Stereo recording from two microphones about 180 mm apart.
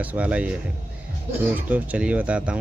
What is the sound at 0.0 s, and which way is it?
Speech, 10° right (ahead or behind).